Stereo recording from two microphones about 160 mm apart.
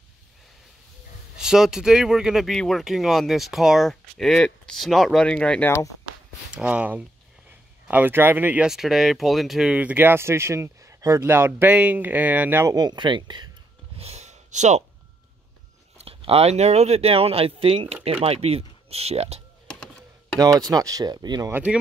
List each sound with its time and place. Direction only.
1.3 s speech: 5° right (ahead or behind); by 5.9 s 15° left (ahead or behind)
6.5 s speech: 10° right (ahead or behind)
12.7 s speech: 25° right (ahead or behind)
13.9 s a sound: 40° right (ahead or behind)
16.0 s speech: 35° right (ahead or behind)
20.3 s speech: 20° right (ahead or behind)
21.5 s speech: 10° right (ahead or behind)